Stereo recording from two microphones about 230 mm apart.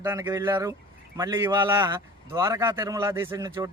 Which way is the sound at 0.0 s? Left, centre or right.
Centre.